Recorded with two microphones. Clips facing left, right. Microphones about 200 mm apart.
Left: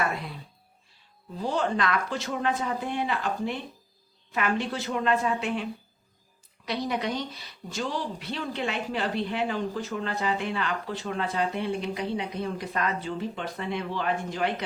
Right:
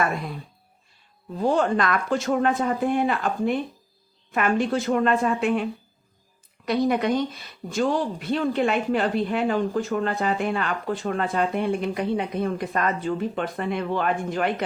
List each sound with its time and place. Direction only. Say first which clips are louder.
1.4 s speech: right 6 dB; 50° right (ahead or behind)
6.7 s speech: right 8 dB; 50° right (ahead or behind)